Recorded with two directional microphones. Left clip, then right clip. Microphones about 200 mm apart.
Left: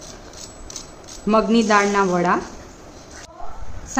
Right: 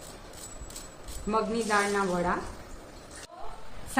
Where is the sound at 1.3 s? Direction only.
50° left (ahead or behind).